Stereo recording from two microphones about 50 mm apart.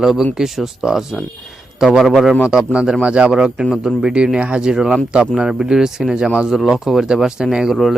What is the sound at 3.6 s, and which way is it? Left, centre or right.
A man's voice, centre.